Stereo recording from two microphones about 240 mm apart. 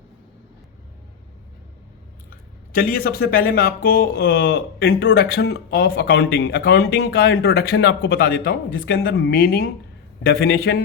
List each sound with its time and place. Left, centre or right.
2.7 s speech: left